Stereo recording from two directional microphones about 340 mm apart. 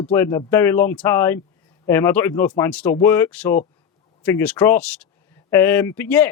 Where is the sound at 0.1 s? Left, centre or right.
Centre.